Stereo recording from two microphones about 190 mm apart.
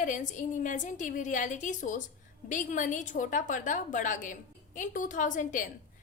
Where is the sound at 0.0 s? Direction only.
40° left (ahead or behind).